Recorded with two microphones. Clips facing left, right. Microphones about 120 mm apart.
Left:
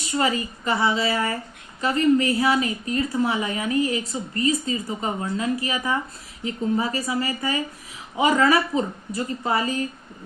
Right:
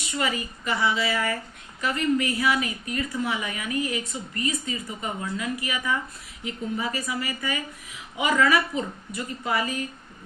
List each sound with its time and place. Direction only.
0.1 s a woman's voice: 35° left (ahead or behind)